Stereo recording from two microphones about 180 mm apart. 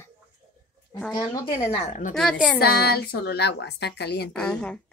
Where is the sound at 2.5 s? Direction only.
60° left (ahead or behind).